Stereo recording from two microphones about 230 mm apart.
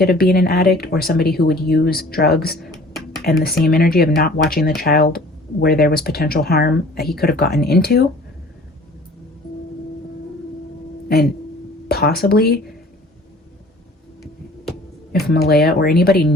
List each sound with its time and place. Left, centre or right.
0.0 s speech: left
11.9 s speech: left
15.3 s speech: left